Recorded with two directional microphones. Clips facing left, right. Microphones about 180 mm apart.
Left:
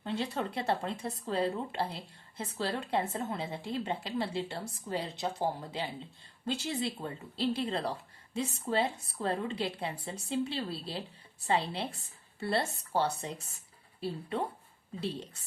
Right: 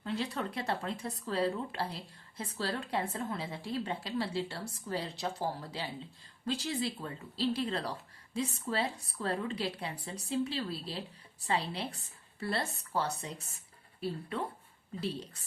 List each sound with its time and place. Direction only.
0.0 s speech: 25° left (ahead or behind)